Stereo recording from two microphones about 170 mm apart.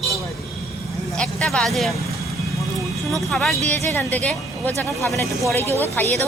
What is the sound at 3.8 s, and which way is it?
Speech, 15° left (ahead or behind).